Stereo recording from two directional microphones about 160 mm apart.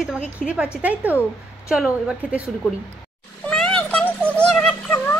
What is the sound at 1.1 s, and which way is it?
Speech, 15° left (ahead or behind).